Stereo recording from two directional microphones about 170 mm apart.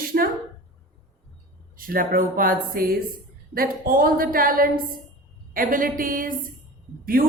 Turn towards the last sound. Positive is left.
turn(degrees=-60)  # may be behind; listen again after turning